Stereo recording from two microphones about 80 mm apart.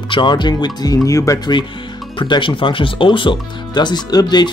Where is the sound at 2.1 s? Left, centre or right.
Left.